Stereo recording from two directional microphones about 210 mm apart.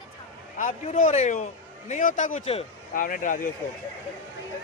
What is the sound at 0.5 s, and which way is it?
A man's voice, 35° left (ahead or behind).